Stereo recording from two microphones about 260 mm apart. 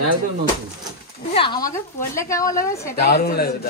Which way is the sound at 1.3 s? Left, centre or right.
Centre.